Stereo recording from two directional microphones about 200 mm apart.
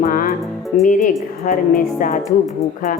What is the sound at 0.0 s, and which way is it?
Music, 45° left (ahead or behind).